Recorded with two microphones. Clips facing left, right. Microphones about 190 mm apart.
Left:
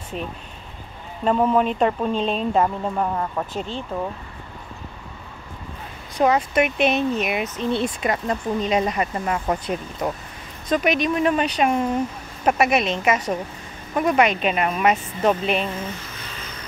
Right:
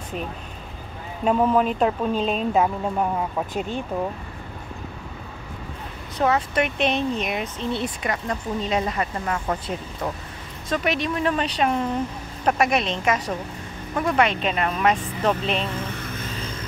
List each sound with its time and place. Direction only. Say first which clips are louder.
1.2 s speech: left 1 dB; centre (ahead or behind)
6.1 s speech: left 3 dB; 15° left (ahead or behind)
7.7 s speech: left 4 dB; 25° left (ahead or behind)